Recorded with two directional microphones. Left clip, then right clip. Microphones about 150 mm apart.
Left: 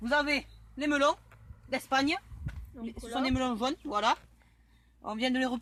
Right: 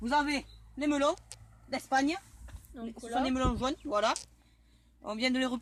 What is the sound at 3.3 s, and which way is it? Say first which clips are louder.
Speech: left 1 dB; 35° left (ahead or behind).